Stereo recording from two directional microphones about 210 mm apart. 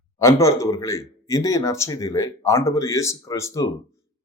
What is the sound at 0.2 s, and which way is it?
Speech, 15° left (ahead or behind).